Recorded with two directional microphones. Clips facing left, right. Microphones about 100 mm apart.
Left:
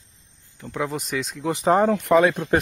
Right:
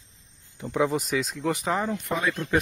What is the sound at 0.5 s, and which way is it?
Speech, 5° right (ahead or behind).